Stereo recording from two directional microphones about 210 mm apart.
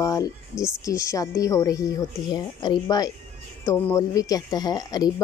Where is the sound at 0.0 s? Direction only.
15° left (ahead or behind).